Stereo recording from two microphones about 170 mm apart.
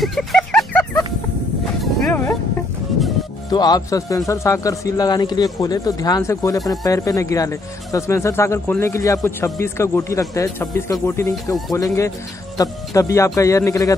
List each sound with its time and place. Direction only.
0.0 s a sound: centre (ahead or behind)
1.8 s dog: 10° left (ahead or behind)
3.4 s a man's voice: 25° left (ahead or behind)